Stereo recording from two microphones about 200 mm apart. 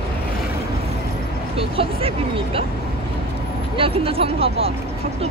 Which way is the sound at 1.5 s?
25° right (ahead or behind).